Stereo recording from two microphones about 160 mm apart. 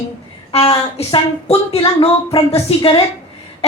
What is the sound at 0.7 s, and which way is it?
Speech, 35° left (ahead or behind).